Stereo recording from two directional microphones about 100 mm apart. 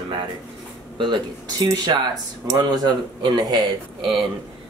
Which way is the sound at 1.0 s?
45° right (ahead or behind).